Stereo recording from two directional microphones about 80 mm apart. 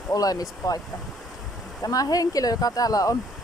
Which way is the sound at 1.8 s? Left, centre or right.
Left.